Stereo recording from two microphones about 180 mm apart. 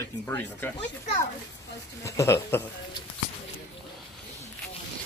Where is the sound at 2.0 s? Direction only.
15° left (ahead or behind).